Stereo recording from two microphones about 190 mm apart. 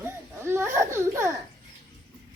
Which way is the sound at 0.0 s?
15° right (ahead or behind).